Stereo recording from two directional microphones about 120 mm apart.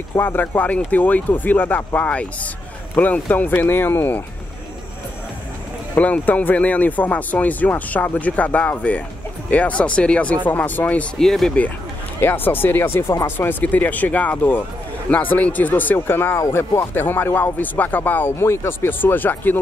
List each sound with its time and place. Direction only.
0.1 s speech: 15° left (ahead or behind)
5.9 s speech: 10° left (ahead or behind)